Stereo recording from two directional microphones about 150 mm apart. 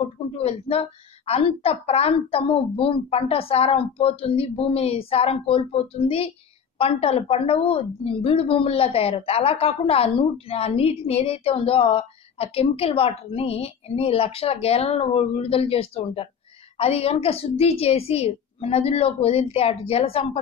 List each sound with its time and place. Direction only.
0.4 s a woman's voice: 40° left (ahead or behind)